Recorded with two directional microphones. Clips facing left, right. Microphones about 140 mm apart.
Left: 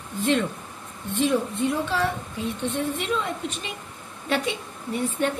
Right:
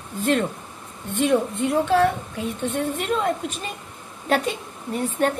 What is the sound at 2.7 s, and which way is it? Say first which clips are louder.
A woman's voice: right 3 dB; 45° right (ahead or behind).